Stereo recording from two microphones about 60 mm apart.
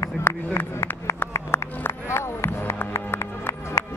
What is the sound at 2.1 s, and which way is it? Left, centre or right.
Music, left.